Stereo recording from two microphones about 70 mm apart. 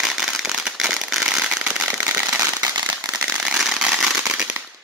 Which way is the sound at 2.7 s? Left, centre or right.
Right.